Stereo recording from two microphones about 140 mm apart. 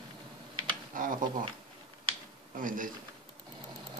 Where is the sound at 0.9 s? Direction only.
75° right (ahead or behind).